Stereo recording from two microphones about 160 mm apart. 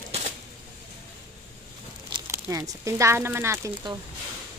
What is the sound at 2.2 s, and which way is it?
Speech, 15° right (ahead or behind).